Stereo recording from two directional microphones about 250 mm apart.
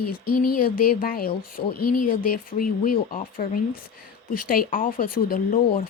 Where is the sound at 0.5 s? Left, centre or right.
Left.